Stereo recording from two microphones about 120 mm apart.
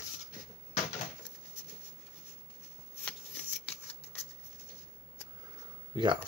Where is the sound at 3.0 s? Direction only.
10° left (ahead or behind).